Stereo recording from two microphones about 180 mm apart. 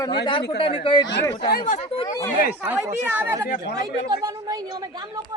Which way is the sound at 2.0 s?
20° left (ahead or behind).